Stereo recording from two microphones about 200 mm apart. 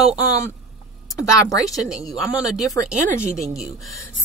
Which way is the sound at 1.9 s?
Centre (ahead or behind).